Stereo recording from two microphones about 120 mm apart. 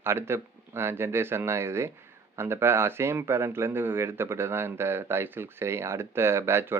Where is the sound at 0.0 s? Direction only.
20° right (ahead or behind).